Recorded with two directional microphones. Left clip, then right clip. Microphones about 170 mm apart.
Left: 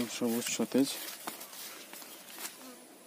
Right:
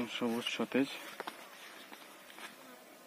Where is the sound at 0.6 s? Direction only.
Centre (ahead or behind).